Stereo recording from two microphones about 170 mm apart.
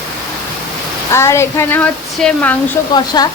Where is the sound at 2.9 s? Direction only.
25° left (ahead or behind).